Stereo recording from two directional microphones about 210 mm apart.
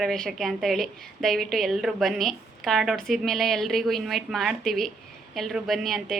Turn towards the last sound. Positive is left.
turn(degrees=0)  # may be behind; listen again after turning